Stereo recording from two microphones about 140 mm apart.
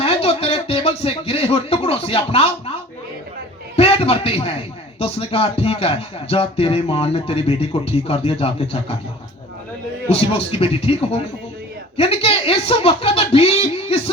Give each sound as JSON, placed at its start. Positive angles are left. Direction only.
{"t": 0.0, "sound": "speech", "side_deg": 45}
{"t": 3.8, "sound": "a man's voice", "side_deg": 45}
{"t": 10.1, "sound": "a man's voice", "side_deg": 45}